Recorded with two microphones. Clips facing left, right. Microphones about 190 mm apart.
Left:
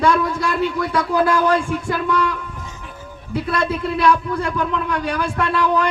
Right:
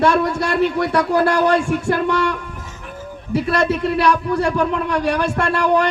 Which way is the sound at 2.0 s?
75° right (ahead or behind).